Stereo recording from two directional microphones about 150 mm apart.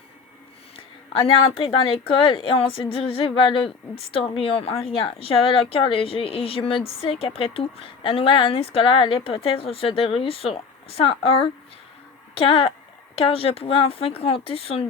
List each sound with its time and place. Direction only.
1.2 s a woman's voice: 40° left (ahead or behind)